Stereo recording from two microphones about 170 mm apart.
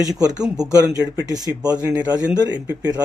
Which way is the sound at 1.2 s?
20° right (ahead or behind).